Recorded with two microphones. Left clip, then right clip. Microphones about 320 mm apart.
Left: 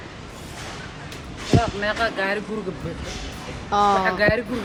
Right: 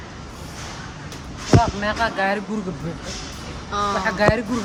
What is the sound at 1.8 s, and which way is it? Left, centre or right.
Speech, right.